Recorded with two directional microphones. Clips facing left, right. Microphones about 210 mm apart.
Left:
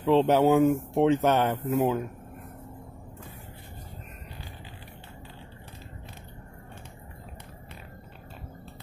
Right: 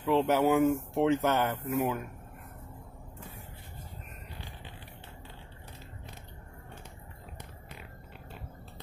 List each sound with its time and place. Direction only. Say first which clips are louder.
0.0 s speech: left 5 dB; 20° left (ahead or behind)